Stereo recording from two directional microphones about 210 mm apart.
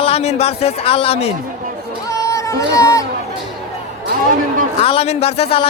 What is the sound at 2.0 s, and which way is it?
Music, 15° left (ahead or behind).